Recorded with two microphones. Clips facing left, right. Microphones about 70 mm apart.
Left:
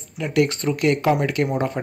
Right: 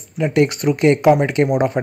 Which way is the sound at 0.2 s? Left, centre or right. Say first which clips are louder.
Right 4 dB; right.